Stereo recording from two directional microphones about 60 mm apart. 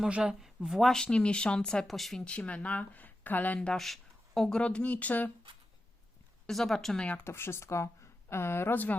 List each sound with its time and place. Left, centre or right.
0.1 s a woman's voice: centre
1.0 s speech: centre
2.2 s speech: centre
3.8 s speech: centre
4.6 s speech: left
6.5 s speech: centre
7.3 s a woman's voice: left